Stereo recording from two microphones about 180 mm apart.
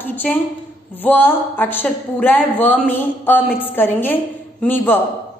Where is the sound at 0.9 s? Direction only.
10° left (ahead or behind).